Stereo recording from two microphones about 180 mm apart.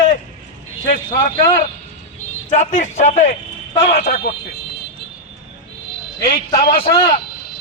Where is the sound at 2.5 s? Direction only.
40° left (ahead or behind).